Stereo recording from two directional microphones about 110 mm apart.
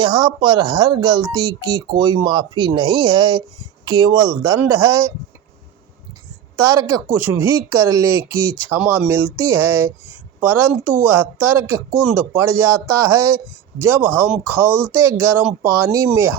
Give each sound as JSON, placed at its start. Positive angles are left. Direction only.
{"t": 0.0, "sound": "speech", "side_deg": -45}
{"t": 6.6, "sound": "speech", "side_deg": -30}